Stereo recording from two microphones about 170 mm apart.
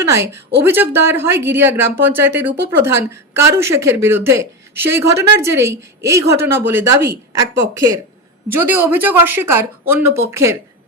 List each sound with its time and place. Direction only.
0.1 s speech: 15° right (ahead or behind)